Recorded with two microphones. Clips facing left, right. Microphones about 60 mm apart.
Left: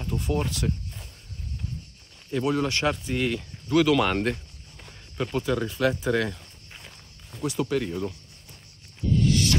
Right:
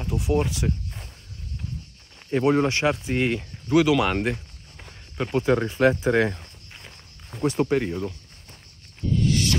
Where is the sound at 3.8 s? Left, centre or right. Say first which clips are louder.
Right 1 dB; centre.